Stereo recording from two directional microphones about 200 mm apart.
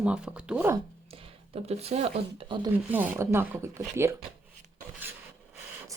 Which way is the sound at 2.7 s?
10° right (ahead or behind).